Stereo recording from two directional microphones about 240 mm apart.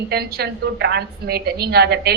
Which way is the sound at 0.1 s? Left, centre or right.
Right.